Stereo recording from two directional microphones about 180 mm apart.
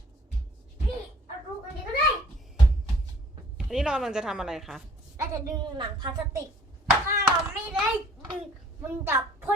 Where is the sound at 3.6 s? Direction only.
5° right (ahead or behind).